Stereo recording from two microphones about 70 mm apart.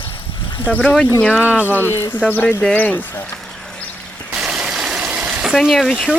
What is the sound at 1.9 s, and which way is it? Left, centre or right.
Speech, left.